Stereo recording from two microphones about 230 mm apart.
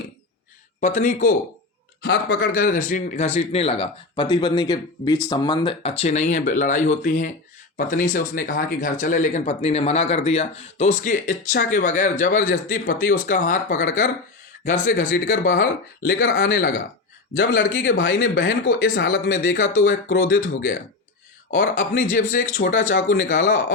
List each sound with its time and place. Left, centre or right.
0.8 s speech: left
2.0 s speech: left
16.1 s speech: left
16.5 s speech: left
17.3 s speech: left
20.1 s speech: left
21.5 s speech: left